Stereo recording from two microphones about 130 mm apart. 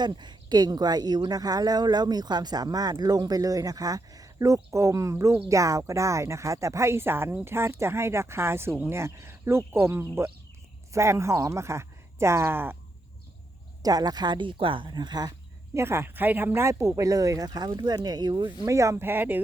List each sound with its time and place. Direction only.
0.0 s speech: 35° right (ahead or behind); by 12.7 s 15° right (ahead or behind)
13.8 s speech: 30° right (ahead or behind)
15.7 s speech: 20° right (ahead or behind)
18.6 s speech: 25° right (ahead or behind)